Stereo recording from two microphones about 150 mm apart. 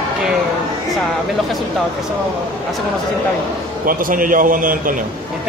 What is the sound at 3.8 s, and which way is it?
A man's voice, 70° right (ahead or behind).